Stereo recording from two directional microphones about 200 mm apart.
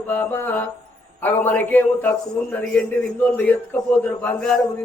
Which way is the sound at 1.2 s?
10° left (ahead or behind).